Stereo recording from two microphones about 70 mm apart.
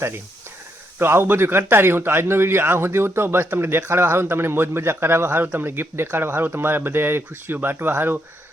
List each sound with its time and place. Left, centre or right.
0.9 s a man's voice: right